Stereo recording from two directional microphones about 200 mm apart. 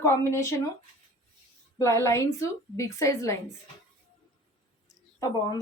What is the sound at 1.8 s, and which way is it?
A woman's voice, 15° left (ahead or behind).